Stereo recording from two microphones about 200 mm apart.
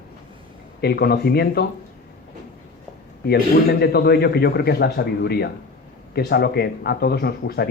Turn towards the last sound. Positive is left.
turn(degrees=50)  # may be behind; listen again after turning